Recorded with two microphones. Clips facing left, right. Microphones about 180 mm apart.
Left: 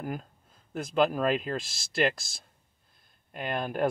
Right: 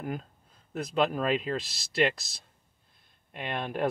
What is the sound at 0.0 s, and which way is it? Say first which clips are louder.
Speech: even; 5° left (ahead or behind).